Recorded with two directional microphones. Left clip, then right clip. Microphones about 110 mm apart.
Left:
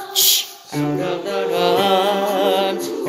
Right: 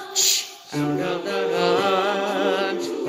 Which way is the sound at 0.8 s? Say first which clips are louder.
Left 3 dB; 30° left (ahead or behind).